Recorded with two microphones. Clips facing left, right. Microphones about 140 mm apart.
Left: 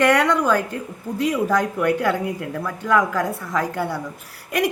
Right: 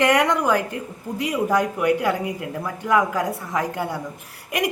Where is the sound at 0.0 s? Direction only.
15° right (ahead or behind).